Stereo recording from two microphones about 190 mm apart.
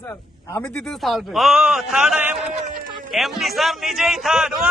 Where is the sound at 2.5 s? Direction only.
40° right (ahead or behind).